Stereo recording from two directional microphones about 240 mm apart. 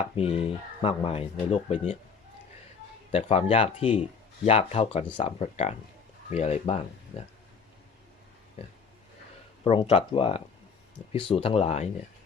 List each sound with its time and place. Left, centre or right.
0.0 s speech: left
3.1 s speech: left
8.6 s speech: left